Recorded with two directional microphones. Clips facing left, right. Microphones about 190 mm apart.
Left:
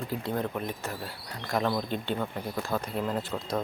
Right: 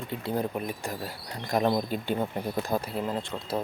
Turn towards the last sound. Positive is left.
turn(degrees=-5)  # may be behind; listen again after turning